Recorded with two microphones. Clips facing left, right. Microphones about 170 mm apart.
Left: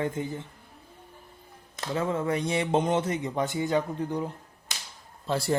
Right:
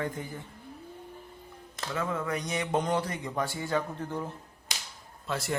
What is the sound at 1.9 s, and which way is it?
A man's voice, 25° left (ahead or behind).